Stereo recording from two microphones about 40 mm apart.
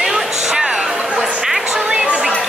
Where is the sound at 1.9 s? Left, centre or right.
Right.